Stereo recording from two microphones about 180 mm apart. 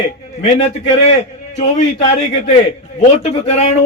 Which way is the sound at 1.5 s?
40° left (ahead or behind).